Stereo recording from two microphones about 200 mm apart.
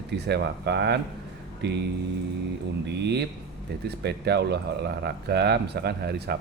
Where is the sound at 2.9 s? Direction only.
60° right (ahead or behind).